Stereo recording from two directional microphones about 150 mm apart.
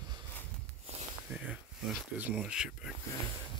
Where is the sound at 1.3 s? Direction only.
10° right (ahead or behind).